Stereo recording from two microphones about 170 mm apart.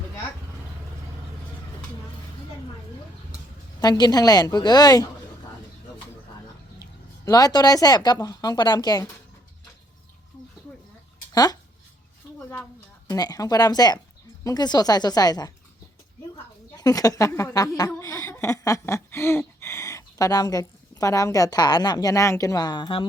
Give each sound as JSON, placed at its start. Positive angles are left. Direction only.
{"t": 3.8, "sound": "a woman's voice", "side_deg": 25}
{"t": 7.3, "sound": "a woman's voice", "side_deg": 20}
{"t": 13.1, "sound": "a woman's voice", "side_deg": 20}
{"t": 16.7, "sound": "a woman's voice", "side_deg": 20}